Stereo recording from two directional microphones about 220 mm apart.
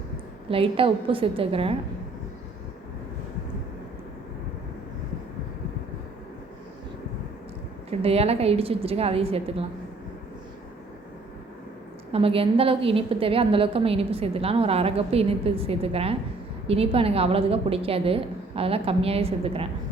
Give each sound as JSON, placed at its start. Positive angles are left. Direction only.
{"t": 0.5, "sound": "a woman's voice", "side_deg": -25}
{"t": 7.9, "sound": "a woman's voice", "side_deg": -25}
{"t": 12.1, "sound": "a woman's voice", "side_deg": -25}